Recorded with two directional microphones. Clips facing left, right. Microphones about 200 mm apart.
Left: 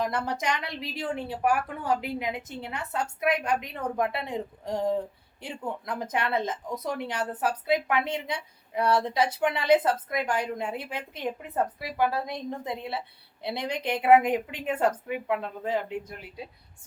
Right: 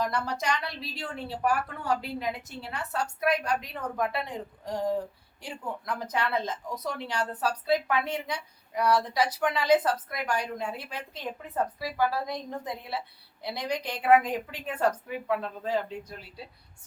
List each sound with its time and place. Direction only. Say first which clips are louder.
0.0 s a woman's voice: left 1 dB; 20° left (ahead or behind)